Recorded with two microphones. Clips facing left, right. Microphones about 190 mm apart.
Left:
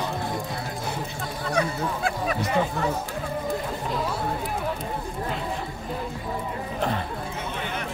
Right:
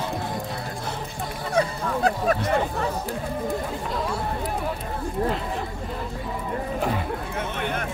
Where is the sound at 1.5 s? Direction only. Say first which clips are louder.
Right 2 dB; 30° right (ahead or behind).